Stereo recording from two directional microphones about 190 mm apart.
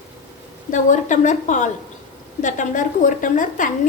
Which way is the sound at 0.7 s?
40° left (ahead or behind).